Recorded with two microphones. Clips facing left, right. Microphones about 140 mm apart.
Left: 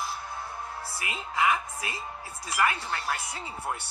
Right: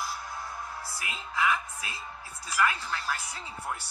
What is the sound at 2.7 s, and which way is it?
Speech, 70° left (ahead or behind).